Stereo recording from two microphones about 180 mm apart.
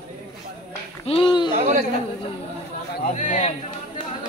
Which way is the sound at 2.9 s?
50° left (ahead or behind).